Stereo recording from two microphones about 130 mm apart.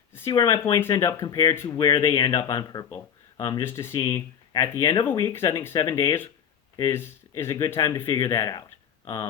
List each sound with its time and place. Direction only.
0.1 s a sound: 20° left (ahead or behind)
0.3 s speech: 25° left (ahead or behind)
3.6 s speech: 20° left (ahead or behind)